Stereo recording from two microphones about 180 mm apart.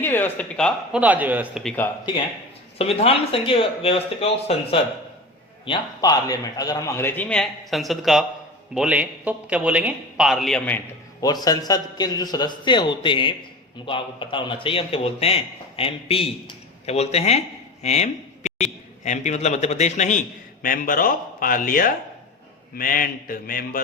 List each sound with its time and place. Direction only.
0.0 s speech: 10° left (ahead or behind)
0.9 s a man's voice: 10° right (ahead or behind)
1.6 s a man's voice: 10° left (ahead or behind)
2.7 s a man's voice: 35° left (ahead or behind)
5.6 s a man's voice: 25° left (ahead or behind); by 10.8 s centre (ahead or behind)
11.2 s a man's voice: 20° left (ahead or behind); by 23.8 s 50° left (ahead or behind)